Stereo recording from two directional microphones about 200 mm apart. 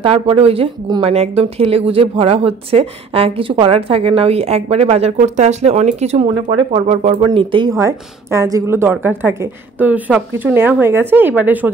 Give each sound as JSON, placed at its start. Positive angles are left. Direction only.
{"t": 0.0, "sound": "a woman's voice", "side_deg": -30}